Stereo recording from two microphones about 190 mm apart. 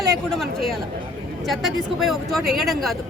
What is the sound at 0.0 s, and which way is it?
Speech, centre (ahead or behind).